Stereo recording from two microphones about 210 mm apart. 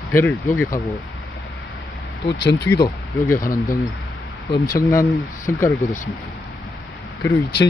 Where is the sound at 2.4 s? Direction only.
55° left (ahead or behind).